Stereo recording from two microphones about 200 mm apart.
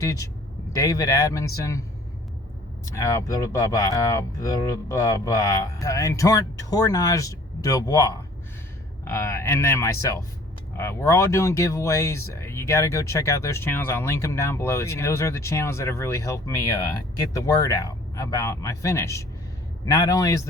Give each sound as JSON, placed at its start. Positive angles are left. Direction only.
{"t": 0.0, "sound": "speech", "side_deg": 15}
{"t": 2.9, "sound": "speech", "side_deg": 15}